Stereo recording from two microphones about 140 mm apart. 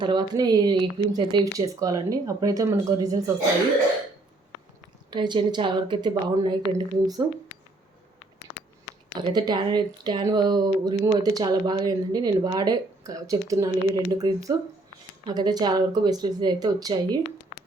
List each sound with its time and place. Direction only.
0.0 s speech: 30° right (ahead or behind)
5.1 s a woman's voice: 35° right (ahead or behind)
9.1 s a woman's voice: 30° right (ahead or behind)